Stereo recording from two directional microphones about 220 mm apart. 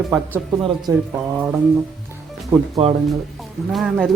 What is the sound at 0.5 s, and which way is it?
Speech, 20° right (ahead or behind).